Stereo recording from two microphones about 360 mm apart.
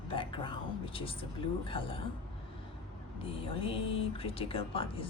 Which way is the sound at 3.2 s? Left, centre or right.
Centre.